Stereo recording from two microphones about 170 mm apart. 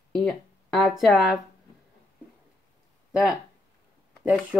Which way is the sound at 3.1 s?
5° right (ahead or behind).